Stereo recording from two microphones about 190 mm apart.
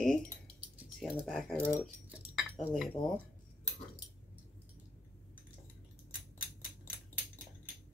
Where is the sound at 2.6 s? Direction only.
Centre (ahead or behind).